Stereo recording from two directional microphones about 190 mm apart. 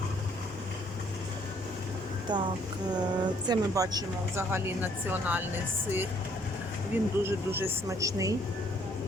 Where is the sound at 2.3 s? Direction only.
25° right (ahead or behind).